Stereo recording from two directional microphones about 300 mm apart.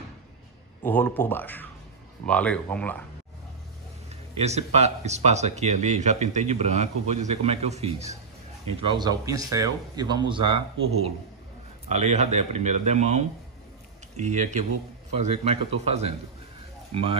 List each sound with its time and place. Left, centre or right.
0.8 s speech: centre
4.4 s speech: right
11.9 s speech: right